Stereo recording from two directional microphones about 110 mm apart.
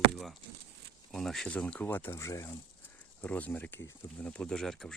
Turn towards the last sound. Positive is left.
turn(degrees=5)  # may be behind; listen again after turning